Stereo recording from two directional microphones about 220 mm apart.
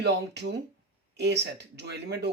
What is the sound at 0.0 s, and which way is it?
Speech, 50° right (ahead or behind).